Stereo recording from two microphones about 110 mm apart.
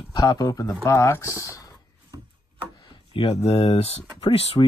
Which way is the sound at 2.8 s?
50° left (ahead or behind).